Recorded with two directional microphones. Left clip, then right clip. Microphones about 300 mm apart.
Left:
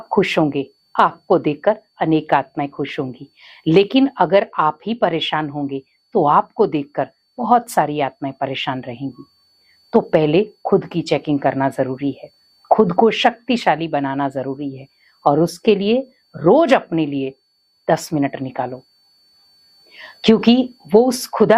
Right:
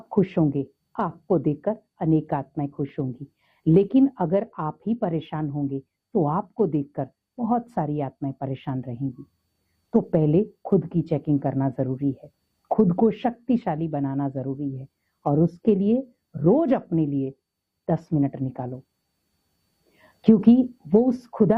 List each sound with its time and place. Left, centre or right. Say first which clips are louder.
0.2 s speech: left 6 dB; centre
19.9 s a sound: left 6 dB; centre
20.9 s speech: left 7 dB; centre
21.2 s speech: left 7 dB; centre